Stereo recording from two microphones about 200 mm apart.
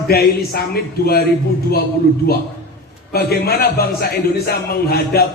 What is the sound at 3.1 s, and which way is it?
A man's voice, 50° left (ahead or behind).